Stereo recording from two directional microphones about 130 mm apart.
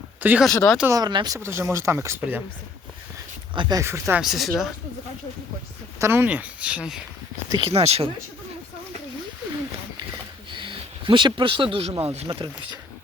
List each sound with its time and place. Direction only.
0.2 s speech: 15° right (ahead or behind)
0.4 s speech: centre (ahead or behind)
0.9 s speech: 30° right (ahead or behind)
1.4 s speech: 20° right (ahead or behind)
3.5 s speech: 40° right (ahead or behind)
3.8 s speech: 20° right (ahead or behind)
4.2 s speech: centre (ahead or behind)
6.0 s speech: 15° right (ahead or behind)
7.5 s speech: 45° right (ahead or behind)
10.5 s speech: 40° right (ahead or behind)